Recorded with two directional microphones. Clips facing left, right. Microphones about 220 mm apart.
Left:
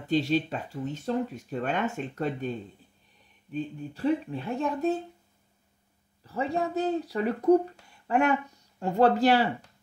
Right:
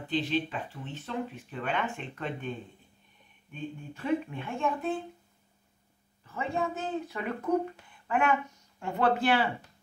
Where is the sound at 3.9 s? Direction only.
35° left (ahead or behind).